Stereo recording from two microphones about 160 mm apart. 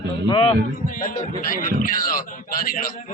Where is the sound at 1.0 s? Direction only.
60° left (ahead or behind).